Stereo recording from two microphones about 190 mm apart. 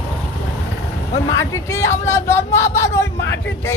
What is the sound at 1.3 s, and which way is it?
Speech, 15° left (ahead or behind).